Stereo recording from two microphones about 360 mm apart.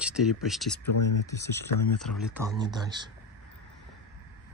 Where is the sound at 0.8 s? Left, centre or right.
Left.